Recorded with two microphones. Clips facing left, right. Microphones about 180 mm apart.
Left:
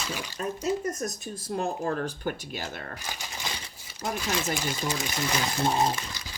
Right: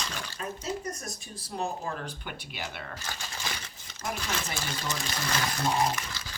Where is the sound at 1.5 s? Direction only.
50° left (ahead or behind).